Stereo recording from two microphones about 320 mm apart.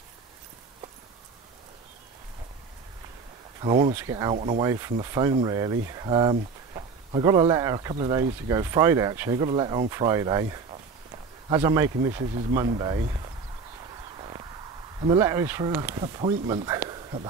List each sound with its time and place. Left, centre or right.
3.6 s speech: centre
14.1 s a sound: centre
15.0 s speech: centre